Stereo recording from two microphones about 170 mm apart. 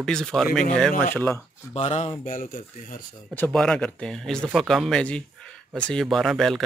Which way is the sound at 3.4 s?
5° left (ahead or behind).